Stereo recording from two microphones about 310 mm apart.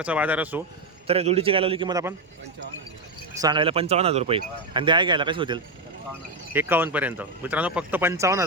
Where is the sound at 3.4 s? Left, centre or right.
Centre.